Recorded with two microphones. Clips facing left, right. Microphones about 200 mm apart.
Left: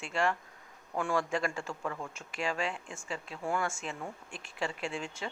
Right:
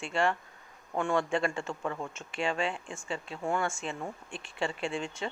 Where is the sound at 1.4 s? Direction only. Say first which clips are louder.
Right 3 dB; 25° right (ahead or behind).